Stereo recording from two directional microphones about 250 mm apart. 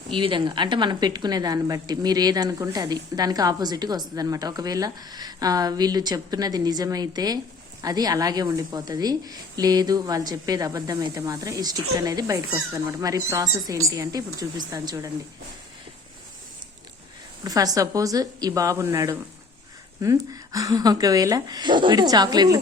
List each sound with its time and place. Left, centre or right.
0.1 s a woman's voice: centre
17.4 s a woman's voice: centre